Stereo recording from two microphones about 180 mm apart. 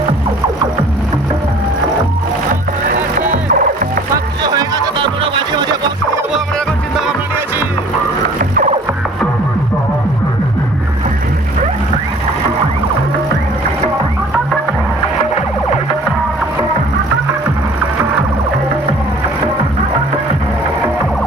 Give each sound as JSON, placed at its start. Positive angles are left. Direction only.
{"t": 3.2, "sound": "music", "side_deg": -45}
{"t": 4.4, "sound": "music", "side_deg": -25}
{"t": 8.4, "sound": "music", "side_deg": -50}